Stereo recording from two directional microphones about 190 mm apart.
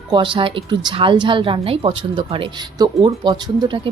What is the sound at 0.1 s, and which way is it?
A woman's voice, 25° right (ahead or behind).